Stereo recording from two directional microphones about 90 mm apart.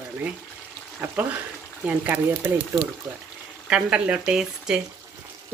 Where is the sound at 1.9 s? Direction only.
20° right (ahead or behind).